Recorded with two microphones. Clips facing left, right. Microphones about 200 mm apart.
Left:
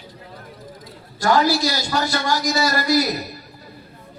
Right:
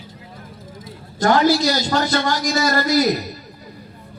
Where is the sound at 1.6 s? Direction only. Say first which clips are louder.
Right 4 dB; 45° right (ahead or behind).